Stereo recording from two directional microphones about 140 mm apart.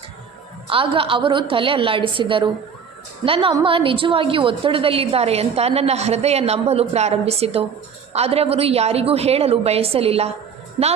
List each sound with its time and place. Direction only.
0.7 s a woman's voice: 40° right (ahead or behind)